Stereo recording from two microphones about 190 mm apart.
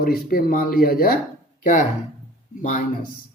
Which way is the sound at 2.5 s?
45° left (ahead or behind).